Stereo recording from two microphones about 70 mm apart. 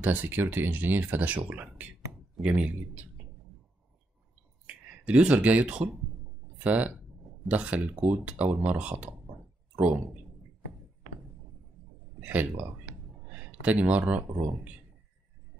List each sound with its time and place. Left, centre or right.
0.0 s speech: right
4.6 s speech: centre
12.2 s speech: right